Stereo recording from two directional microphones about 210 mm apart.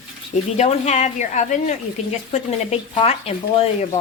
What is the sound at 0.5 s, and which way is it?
Speech, 30° left (ahead or behind).